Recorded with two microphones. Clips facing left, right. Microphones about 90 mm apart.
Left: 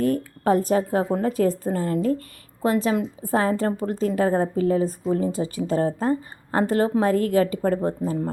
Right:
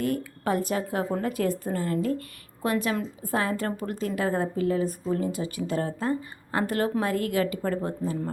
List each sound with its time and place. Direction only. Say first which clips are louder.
0.0 s speech: left 6 dB; 40° left (ahead or behind)